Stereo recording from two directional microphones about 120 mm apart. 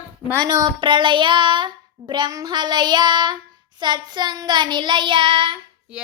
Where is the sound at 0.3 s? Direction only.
35° right (ahead or behind).